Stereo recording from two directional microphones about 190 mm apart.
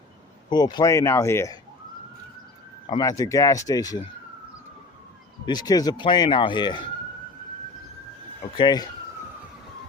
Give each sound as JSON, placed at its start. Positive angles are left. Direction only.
{"t": 0.5, "sound": "speech", "side_deg": 20}
{"t": 3.0, "sound": "speech", "side_deg": 15}
{"t": 5.5, "sound": "speech", "side_deg": 20}
{"t": 8.5, "sound": "speech", "side_deg": 20}